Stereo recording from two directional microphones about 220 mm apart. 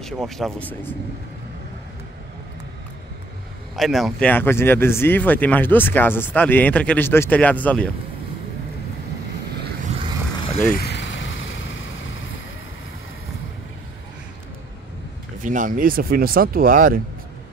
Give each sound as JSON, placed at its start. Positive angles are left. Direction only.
{"t": 0.0, "sound": "speech", "side_deg": 0}
{"t": 3.7, "sound": "speech", "side_deg": 0}
{"t": 9.9, "sound": "vehicle", "side_deg": -30}
{"t": 10.7, "sound": "vehicle", "side_deg": 45}
{"t": 15.4, "sound": "speech", "side_deg": -35}